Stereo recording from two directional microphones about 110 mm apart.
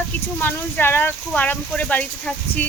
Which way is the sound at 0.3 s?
20° left (ahead or behind).